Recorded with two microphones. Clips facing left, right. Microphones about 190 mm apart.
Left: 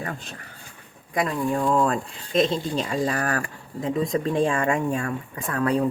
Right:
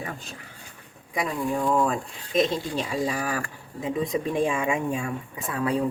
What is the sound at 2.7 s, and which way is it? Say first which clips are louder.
Speech: left 2 dB; 5° right (ahead or behind).